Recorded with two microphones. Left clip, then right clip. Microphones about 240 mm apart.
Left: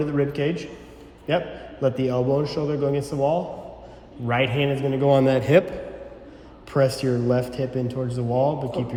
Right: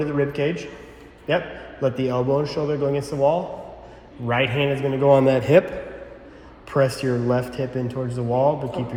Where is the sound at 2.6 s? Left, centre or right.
Centre.